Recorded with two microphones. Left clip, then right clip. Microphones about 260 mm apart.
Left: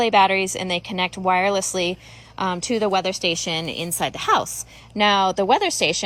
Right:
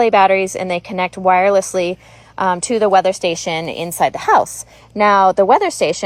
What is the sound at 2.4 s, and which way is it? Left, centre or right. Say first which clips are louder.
A woman's voice: right 7 dB; centre.